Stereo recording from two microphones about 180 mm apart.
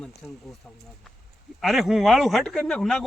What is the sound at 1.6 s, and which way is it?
Speech, centre (ahead or behind).